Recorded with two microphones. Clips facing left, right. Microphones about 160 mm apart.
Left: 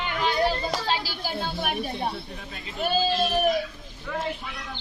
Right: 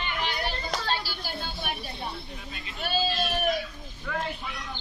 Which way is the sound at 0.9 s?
90° left.